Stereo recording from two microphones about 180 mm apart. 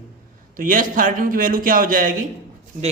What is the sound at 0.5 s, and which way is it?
A man's voice, 50° right (ahead or behind).